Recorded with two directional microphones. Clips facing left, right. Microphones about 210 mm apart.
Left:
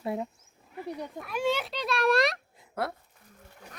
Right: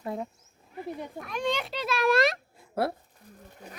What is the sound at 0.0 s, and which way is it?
A child's voice, 10° left (ahead or behind).